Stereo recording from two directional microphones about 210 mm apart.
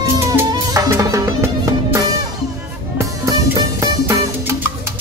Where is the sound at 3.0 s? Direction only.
15° right (ahead or behind).